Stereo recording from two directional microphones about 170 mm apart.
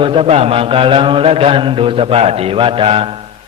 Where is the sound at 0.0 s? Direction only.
30° right (ahead or behind).